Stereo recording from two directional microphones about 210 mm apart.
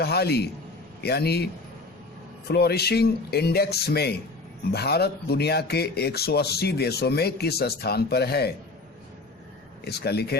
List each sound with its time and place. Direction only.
0.0 s speech: 50° left (ahead or behind)
2.5 s speech: 50° left (ahead or behind)
9.8 s speech: 50° left (ahead or behind)